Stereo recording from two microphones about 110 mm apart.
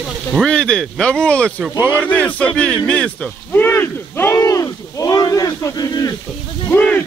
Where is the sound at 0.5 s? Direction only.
10° left (ahead or behind); by 6.1 s 35° left (ahead or behind).